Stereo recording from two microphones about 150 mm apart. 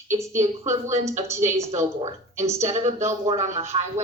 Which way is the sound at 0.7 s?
50° right (ahead or behind).